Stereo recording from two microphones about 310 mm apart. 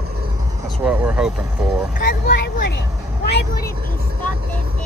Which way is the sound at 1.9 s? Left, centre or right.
Left.